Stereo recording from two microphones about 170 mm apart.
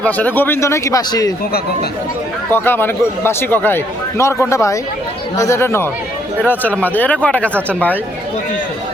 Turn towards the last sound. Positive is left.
turn(degrees=10)  # may be behind; listen again after turning